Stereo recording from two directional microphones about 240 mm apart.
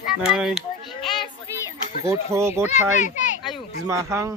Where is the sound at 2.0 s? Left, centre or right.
Centre.